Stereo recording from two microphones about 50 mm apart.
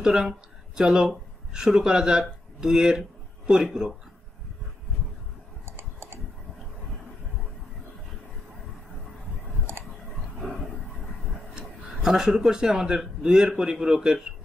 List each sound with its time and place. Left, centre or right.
0.0 s speech: centre
5.7 s typing: right
11.5 s speech: centre